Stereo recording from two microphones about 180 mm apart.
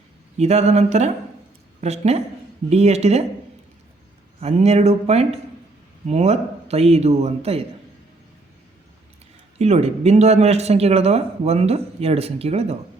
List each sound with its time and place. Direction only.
0.3 s speech: 35° right (ahead or behind)
4.4 s speech: 35° right (ahead or behind)
9.6 s speech: 35° right (ahead or behind)